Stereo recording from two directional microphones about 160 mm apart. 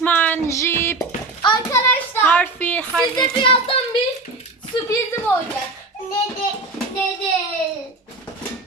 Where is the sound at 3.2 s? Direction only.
30° left (ahead or behind).